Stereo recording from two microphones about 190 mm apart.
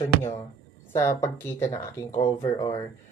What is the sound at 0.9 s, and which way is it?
Speech, 15° left (ahead or behind).